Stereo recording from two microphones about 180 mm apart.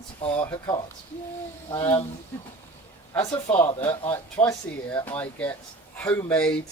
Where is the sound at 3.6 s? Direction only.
25° left (ahead or behind).